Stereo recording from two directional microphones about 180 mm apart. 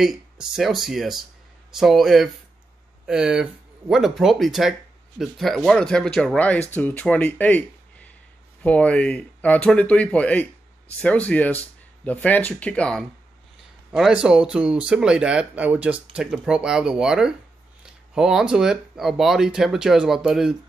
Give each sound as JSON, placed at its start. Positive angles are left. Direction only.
{"t": 0.0, "sound": "speech", "side_deg": 0}